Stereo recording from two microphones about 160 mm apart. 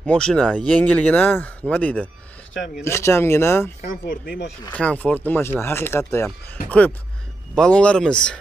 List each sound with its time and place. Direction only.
0.0 s speech: 5° left (ahead or behind)
3.8 s speech: 60° left (ahead or behind)
4.7 s speech: 10° left (ahead or behind)